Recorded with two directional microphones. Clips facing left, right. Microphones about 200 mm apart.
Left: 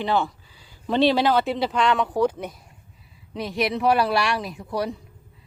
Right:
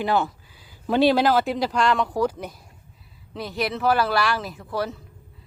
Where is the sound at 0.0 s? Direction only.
5° right (ahead or behind).